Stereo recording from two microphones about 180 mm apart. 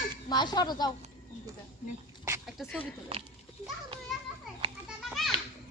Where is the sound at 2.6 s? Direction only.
Centre (ahead or behind).